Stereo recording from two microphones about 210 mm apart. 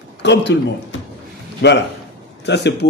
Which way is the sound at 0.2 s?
55° left (ahead or behind).